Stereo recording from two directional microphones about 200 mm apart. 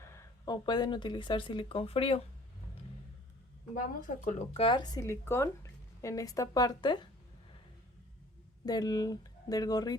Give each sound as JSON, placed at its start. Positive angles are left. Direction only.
{"t": 0.0, "sound": "speech", "side_deg": 15}
{"t": 3.8, "sound": "speech", "side_deg": 40}
{"t": 8.6, "sound": "speech", "side_deg": 20}